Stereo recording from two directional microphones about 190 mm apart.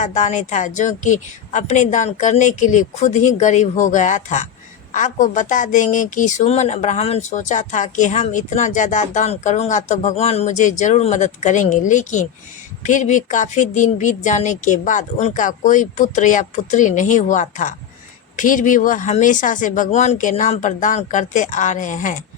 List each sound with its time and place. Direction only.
0.0 s speech: 40° left (ahead or behind)